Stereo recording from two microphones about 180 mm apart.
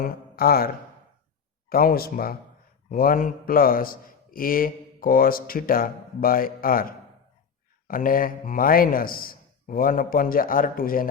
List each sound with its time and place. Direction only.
0.0 s speech: 55° left (ahead or behind)
1.7 s a man's voice: 55° left (ahead or behind)
7.9 s a man's voice: 50° left (ahead or behind)